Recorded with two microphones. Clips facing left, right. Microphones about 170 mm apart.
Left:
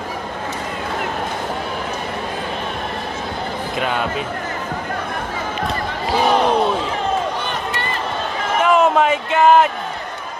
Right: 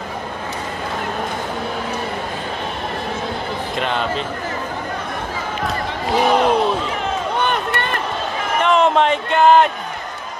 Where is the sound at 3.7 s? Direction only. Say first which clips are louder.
Even; 5° left (ahead or behind).